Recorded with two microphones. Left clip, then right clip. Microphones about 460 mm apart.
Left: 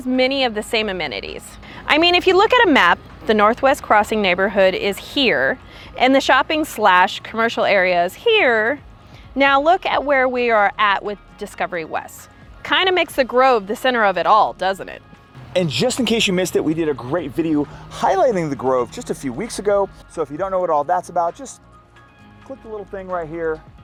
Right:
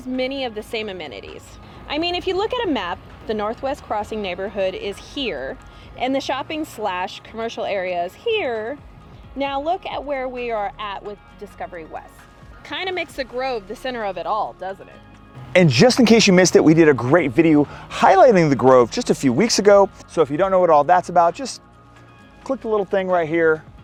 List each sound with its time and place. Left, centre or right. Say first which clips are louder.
0.0 s a woman's voice: left 7 dB; left
12.6 s a woman's voice: left 9 dB; left
15.8 s speech: right 5 dB; right
20.1 s speech: right 5 dB; right
21.0 s speech: right 4 dB; right
22.4 s speech: right 10 dB; right